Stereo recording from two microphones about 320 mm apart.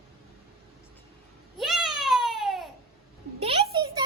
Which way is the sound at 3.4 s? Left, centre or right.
Centre.